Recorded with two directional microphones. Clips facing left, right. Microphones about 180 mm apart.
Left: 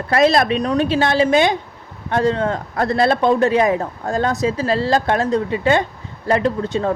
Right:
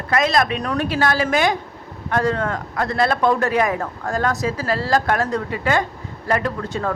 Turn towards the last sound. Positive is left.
turn(degrees=25)  # may be behind; listen again after turning